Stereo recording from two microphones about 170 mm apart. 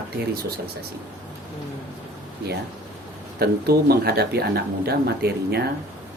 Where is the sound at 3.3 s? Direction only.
65° right (ahead or behind).